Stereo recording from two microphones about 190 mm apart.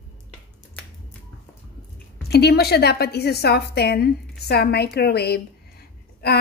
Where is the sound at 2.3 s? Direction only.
55° left (ahead or behind).